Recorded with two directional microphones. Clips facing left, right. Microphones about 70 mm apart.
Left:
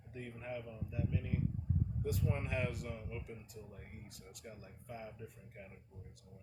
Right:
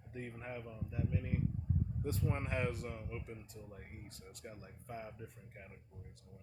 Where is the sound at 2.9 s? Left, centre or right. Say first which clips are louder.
Even; right.